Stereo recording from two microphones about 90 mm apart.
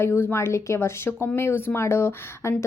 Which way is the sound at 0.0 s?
25° left (ahead or behind).